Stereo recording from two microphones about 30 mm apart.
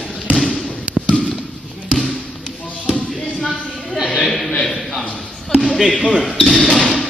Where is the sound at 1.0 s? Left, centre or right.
Left.